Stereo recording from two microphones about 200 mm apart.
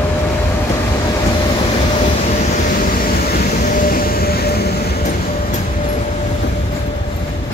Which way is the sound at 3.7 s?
45° left (ahead or behind).